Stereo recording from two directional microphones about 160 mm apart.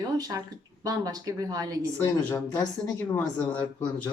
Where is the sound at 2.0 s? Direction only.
15° left (ahead or behind).